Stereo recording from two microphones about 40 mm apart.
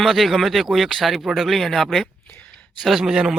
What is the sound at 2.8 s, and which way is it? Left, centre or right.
Speech, centre.